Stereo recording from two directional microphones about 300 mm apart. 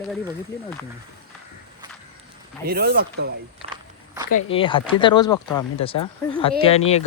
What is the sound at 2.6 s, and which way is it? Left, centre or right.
Speech, right.